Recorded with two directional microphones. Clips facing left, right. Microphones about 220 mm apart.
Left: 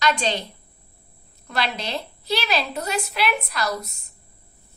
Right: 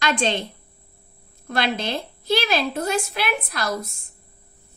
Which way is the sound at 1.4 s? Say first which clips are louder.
Right 3 dB; 50° right (ahead or behind).